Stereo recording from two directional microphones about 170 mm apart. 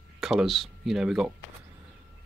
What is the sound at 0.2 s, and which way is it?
Speech, centre (ahead or behind).